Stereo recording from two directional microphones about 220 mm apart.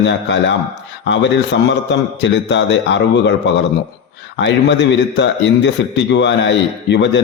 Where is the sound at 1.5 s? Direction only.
55° left (ahead or behind).